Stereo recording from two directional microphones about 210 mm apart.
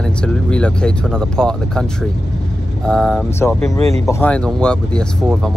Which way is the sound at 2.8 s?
5° left (ahead or behind).